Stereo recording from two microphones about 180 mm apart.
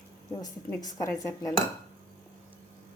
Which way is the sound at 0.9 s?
20° left (ahead or behind).